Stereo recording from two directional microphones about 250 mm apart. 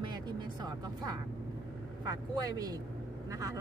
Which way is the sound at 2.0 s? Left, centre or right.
Centre.